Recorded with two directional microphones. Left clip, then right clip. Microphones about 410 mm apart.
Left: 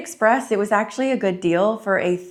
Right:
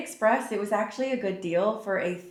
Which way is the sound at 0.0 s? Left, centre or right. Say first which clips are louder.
Left 6 dB; left.